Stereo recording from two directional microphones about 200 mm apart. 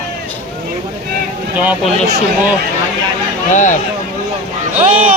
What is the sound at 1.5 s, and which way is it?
Speech, 5° right (ahead or behind).